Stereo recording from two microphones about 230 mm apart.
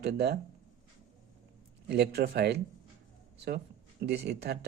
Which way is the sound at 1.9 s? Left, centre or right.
Right.